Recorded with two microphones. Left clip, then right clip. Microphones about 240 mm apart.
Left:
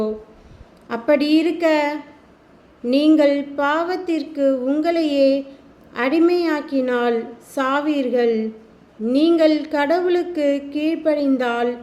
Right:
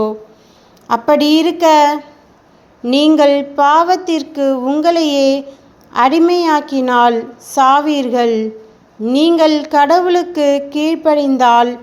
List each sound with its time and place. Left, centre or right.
0.9 s a woman's voice: centre